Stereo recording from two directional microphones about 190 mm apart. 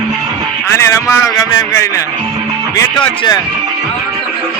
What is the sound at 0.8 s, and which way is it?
A man's voice, 15° left (ahead or behind).